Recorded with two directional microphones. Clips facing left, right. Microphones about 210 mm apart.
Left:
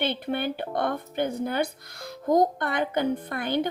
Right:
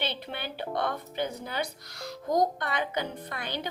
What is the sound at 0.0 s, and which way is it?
A woman's voice, 50° left (ahead or behind).